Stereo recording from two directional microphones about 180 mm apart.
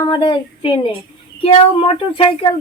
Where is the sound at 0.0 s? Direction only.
25° left (ahead or behind).